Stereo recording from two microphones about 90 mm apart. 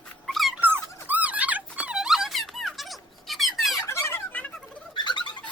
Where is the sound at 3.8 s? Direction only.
30° left (ahead or behind).